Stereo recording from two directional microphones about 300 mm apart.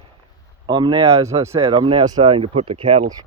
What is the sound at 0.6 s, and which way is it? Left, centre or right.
Speech, centre.